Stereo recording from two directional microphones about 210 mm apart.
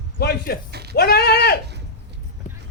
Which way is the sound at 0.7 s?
50° right (ahead or behind).